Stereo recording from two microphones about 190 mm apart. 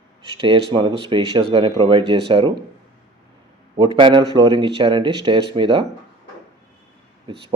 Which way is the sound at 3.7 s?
25° right (ahead or behind).